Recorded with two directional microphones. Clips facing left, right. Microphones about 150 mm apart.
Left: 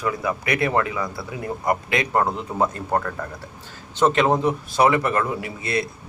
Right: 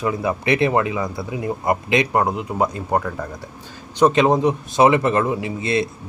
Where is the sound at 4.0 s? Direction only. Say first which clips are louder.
Right 3 dB; 15° right (ahead or behind).